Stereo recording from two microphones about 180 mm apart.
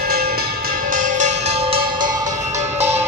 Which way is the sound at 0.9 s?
45° right (ahead or behind).